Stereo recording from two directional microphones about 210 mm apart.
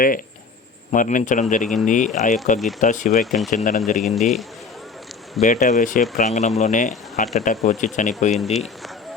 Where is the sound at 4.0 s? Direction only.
Centre (ahead or behind).